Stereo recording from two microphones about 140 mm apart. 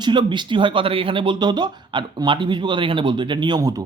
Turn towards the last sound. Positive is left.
turn(degrees=-25)  # may be behind; listen again after turning